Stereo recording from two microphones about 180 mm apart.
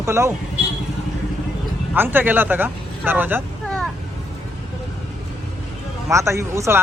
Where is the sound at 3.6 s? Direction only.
Centre (ahead or behind).